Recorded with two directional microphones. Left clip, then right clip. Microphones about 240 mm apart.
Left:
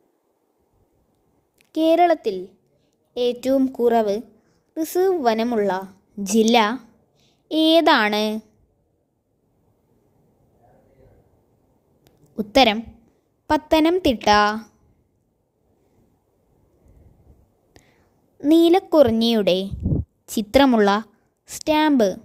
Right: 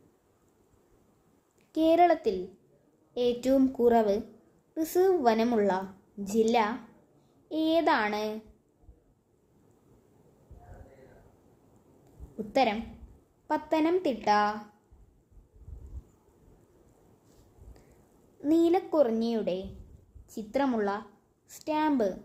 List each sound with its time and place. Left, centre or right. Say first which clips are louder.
1.5 s a woman's voice: left 6 dB; left
12.4 s a woman's voice: left 10 dB; left
17.7 s whispering: left 8 dB; left
18.3 s a woman's voice: left 10 dB; left